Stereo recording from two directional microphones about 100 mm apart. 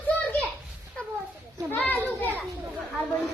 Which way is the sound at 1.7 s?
15° left (ahead or behind).